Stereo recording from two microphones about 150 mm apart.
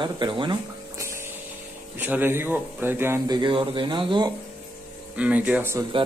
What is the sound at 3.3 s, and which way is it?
Speech, 30° right (ahead or behind).